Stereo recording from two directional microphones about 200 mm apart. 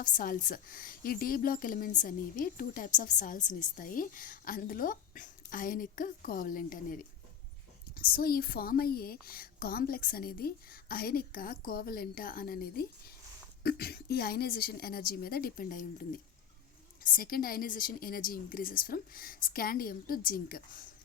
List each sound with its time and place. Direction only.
0.0 s speech: 40° left (ahead or behind)